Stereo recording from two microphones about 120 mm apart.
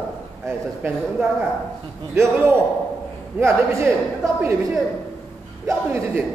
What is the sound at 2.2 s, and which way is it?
A man's voice, 20° right (ahead or behind).